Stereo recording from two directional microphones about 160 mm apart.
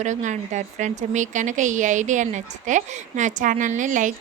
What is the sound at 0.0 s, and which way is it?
A woman's voice, 50° right (ahead or behind).